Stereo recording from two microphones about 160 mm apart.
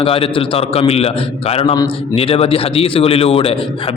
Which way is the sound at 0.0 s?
35° left (ahead or behind).